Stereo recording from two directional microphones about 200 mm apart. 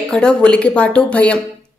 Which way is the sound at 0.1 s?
5° left (ahead or behind).